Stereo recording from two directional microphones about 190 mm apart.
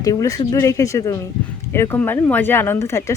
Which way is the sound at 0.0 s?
15° left (ahead or behind).